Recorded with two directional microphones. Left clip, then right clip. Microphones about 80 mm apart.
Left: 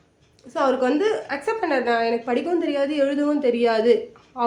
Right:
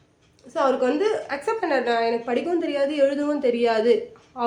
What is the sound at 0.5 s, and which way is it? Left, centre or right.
A woman's voice, left.